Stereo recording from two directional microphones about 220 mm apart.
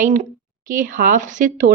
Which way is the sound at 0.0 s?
35° right (ahead or behind).